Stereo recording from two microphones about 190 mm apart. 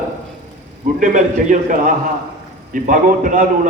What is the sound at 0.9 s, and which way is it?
Speech, 40° right (ahead or behind).